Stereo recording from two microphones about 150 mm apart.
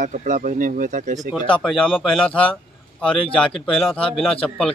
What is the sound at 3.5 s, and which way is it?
Speech, 35° left (ahead or behind).